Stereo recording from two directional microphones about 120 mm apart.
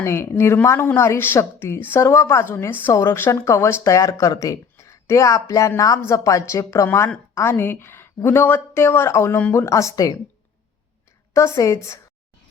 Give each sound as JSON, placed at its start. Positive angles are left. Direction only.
{"t": 0.0, "sound": "a woman's voice", "side_deg": 20}
{"t": 11.3, "sound": "a woman's voice", "side_deg": 25}